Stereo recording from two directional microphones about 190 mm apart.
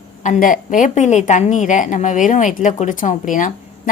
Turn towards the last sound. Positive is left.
turn(degrees=45)  # may be behind; listen again after turning